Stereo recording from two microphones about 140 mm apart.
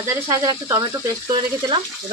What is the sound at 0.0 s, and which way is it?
Frying, 25° right (ahead or behind).